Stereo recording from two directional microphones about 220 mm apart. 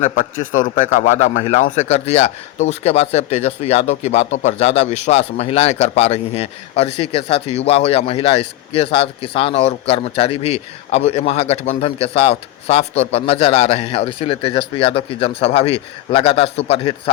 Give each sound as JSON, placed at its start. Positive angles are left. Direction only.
{"t": 0.0, "sound": "a man's voice", "side_deg": 35}